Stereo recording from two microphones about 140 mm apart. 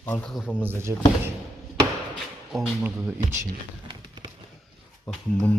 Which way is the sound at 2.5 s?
Centre (ahead or behind).